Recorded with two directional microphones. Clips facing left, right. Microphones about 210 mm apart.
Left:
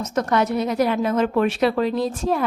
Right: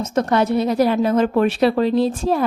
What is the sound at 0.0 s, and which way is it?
A woman's voice, 30° right (ahead or behind).